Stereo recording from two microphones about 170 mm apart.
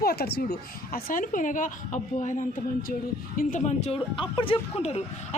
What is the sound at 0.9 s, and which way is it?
A woman's voice, 55° left (ahead or behind).